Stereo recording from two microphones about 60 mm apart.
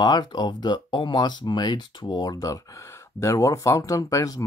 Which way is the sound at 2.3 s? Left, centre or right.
Left.